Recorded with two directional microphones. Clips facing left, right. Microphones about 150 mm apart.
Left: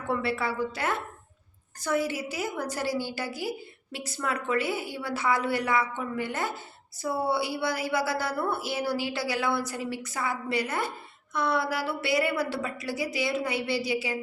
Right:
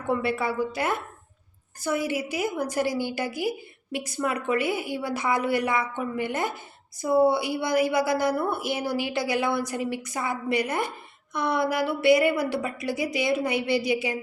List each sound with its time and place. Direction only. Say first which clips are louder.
0.1 s a woman's voice: right 3 dB; 15° right (ahead or behind)